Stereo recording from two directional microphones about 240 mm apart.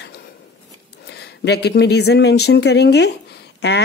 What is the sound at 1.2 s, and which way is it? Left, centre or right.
A woman's voice, left.